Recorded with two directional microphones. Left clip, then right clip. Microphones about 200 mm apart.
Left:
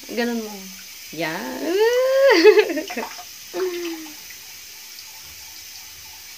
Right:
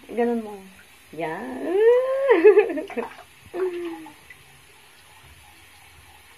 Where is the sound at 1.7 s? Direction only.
40° left (ahead or behind).